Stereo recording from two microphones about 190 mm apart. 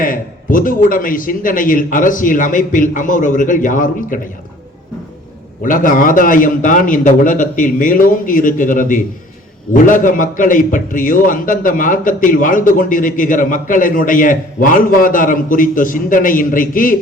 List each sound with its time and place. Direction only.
0.0 s a man's voice: 45° left (ahead or behind)
5.6 s a man's voice: 45° left (ahead or behind)